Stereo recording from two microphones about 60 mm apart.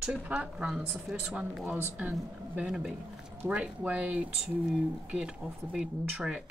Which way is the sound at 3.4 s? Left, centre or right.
Right.